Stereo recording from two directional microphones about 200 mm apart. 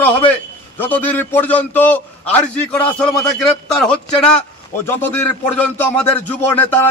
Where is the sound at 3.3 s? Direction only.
5° left (ahead or behind).